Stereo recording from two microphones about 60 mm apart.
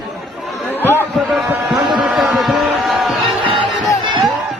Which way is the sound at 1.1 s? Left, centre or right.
Centre.